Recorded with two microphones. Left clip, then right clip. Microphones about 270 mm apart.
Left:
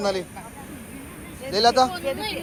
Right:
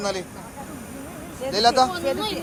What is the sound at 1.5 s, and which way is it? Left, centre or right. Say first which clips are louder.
Speech: even; centre.